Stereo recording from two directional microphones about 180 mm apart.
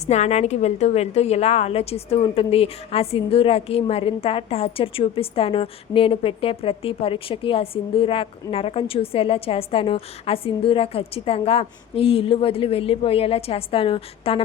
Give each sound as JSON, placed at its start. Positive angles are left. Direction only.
{"t": 0.1, "sound": "a woman's voice", "side_deg": 40}